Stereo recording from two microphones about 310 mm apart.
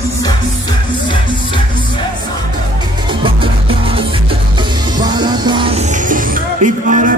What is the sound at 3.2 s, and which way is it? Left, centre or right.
Music, centre.